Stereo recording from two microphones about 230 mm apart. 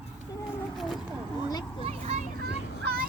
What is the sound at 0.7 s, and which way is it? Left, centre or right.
Vehicle, centre.